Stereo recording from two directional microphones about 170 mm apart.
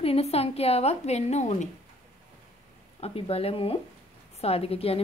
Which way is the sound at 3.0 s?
35° left (ahead or behind).